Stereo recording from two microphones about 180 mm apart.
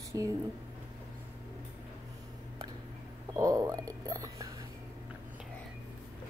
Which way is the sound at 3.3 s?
20° right (ahead or behind).